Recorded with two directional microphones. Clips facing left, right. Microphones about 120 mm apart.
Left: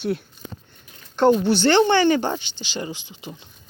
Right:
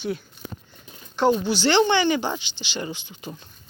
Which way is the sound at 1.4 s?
55° left (ahead or behind).